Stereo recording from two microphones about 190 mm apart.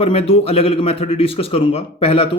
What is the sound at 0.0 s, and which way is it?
Speech, 30° left (ahead or behind).